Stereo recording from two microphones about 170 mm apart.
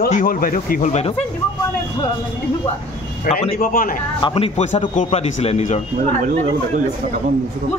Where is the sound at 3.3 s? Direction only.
40° left (ahead or behind).